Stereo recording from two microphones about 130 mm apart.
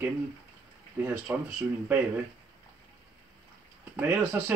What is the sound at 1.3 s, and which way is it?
Speech, 15° right (ahead or behind).